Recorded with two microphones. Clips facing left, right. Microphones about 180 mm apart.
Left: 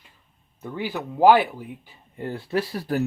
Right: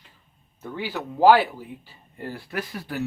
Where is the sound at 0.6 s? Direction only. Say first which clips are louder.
Left 1 dB; 15° left (ahead or behind).